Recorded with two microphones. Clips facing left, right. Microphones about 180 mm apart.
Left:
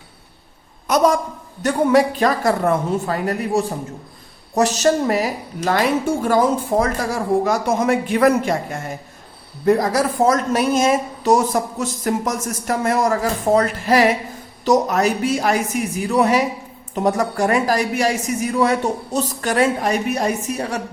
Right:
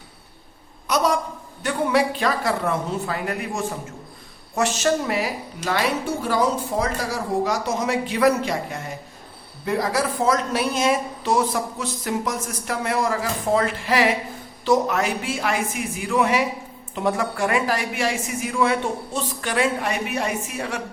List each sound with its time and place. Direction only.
0.9 s a woman's voice: 50° left (ahead or behind)